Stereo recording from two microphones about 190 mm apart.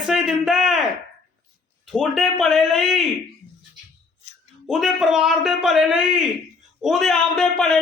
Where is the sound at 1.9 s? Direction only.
5° right (ahead or behind).